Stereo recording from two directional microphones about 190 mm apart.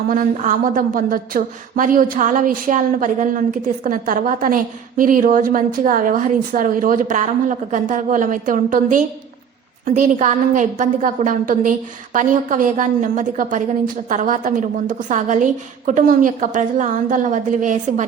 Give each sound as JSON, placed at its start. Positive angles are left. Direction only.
{"t": 0.1, "sound": "a woman's voice", "side_deg": -45}